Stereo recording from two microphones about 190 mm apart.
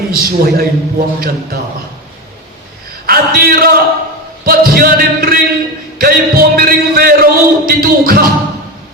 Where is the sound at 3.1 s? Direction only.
50° right (ahead or behind).